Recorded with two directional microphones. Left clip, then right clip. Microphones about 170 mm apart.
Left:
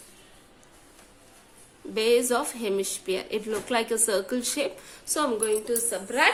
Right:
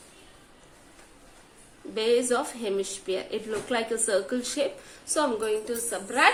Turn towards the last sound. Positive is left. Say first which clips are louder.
# right 1 dB
turn(degrees=20)  # may be behind; listen again after turning